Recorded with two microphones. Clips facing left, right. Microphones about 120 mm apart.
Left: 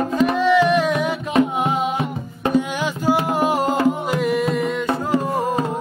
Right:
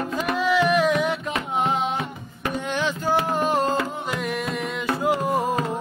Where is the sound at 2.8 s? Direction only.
10° left (ahead or behind).